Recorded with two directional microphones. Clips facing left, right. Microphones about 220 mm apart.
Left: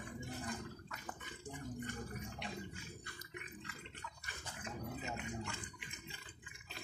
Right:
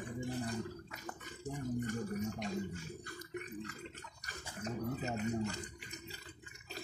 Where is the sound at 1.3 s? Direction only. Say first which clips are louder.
Right 9 dB; 40° right (ahead or behind).